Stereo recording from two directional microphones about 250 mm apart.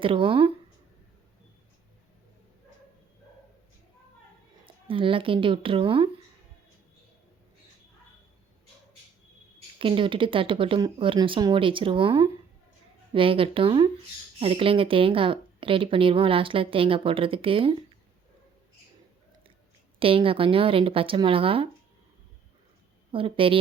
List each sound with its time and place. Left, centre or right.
0.0 s speech: right
4.6 s speech: right
9.7 s speech: right
20.0 s speech: right
23.1 s speech: right